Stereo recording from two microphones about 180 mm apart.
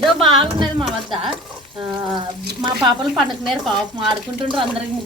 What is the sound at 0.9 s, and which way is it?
Speech, centre (ahead or behind).